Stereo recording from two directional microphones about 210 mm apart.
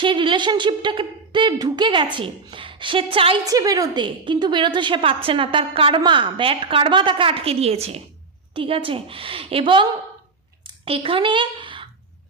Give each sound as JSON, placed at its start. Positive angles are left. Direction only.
{"t": 0.0, "sound": "a woman's voice", "side_deg": -25}